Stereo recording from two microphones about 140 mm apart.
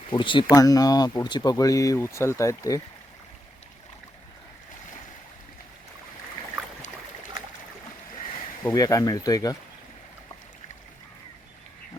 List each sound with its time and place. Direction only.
0.1 s speech: 35° left (ahead or behind)
8.6 s speech: 25° left (ahead or behind)